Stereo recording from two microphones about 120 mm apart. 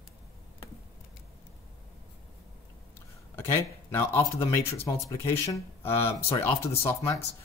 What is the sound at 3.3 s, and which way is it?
Speech, 20° left (ahead or behind).